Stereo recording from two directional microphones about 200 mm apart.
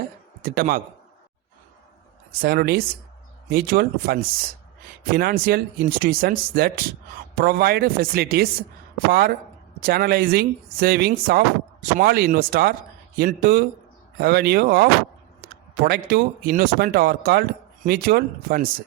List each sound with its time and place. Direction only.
0.4 s speech: 45° right (ahead or behind)
2.4 s speech: 50° right (ahead or behind)
9.8 s speech: 50° right (ahead or behind)